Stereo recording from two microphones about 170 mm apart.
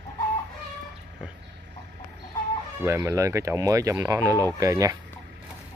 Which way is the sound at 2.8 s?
15° right (ahead or behind).